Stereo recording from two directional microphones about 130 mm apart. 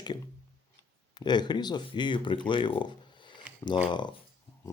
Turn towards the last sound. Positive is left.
turn(degrees=35)  # may be behind; listen again after turning